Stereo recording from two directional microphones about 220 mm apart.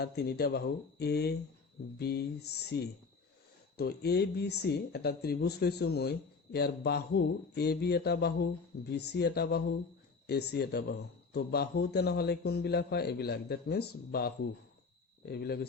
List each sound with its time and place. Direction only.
0.0 s speech: 45° left (ahead or behind)